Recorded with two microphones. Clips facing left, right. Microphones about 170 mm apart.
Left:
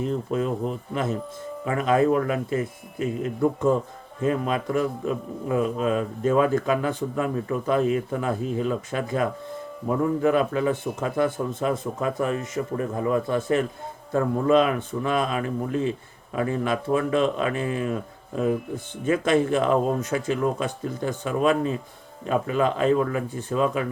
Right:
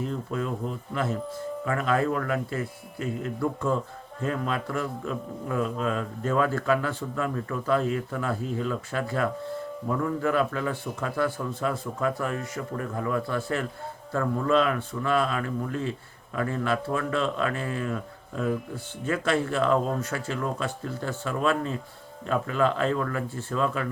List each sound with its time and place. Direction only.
0.0 s speech: 20° left (ahead or behind)